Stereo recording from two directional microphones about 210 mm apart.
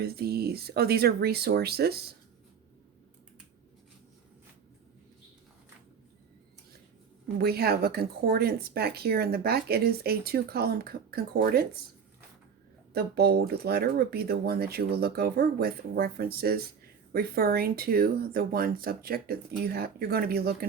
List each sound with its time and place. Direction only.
0.0 s speech: 50° right (ahead or behind)
7.3 s speech: 50° right (ahead or behind)
12.9 s speech: 50° right (ahead or behind)